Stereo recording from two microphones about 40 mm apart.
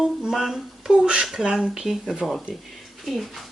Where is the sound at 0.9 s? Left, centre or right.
Right.